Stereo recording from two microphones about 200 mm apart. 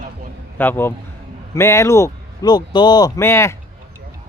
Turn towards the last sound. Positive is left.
turn(degrees=15)  # may be behind; listen again after turning